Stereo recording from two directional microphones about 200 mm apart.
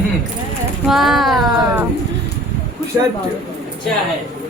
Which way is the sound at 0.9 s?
Centre (ahead or behind).